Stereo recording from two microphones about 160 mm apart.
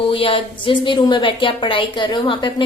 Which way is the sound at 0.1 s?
35° left (ahead or behind).